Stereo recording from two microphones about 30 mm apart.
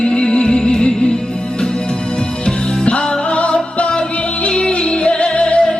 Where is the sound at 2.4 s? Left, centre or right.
Left.